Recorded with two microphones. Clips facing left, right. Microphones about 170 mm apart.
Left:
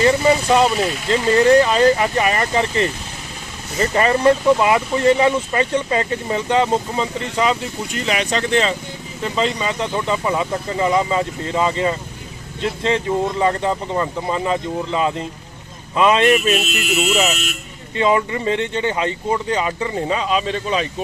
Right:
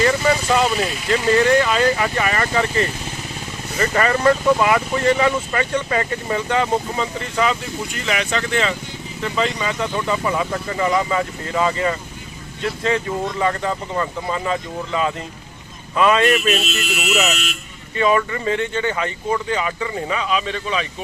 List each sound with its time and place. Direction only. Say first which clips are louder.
0.0 s speech: left 3 dB; 25° left (ahead or behind)
16.3 s speech: left 2 dB; 10° left (ahead or behind)
17.0 s speech: left 2 dB; 30° left (ahead or behind)